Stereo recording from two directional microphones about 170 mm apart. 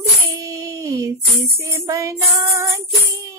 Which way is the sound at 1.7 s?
20° right (ahead or behind).